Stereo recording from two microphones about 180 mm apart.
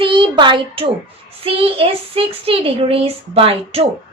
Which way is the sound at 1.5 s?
30° right (ahead or behind).